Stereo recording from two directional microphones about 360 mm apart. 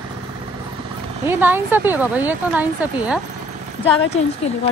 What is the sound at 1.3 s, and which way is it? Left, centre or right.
Speech, centre.